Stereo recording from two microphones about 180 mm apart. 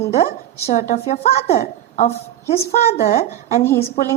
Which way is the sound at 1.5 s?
55° left (ahead or behind).